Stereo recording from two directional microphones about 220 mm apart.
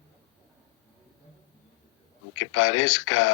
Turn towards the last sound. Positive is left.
turn(degrees=70)  # may be behind; listen again after turning